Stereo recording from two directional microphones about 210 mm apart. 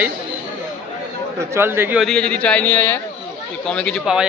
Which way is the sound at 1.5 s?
10° right (ahead or behind).